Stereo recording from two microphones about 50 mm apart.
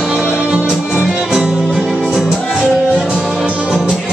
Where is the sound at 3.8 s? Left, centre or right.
Centre.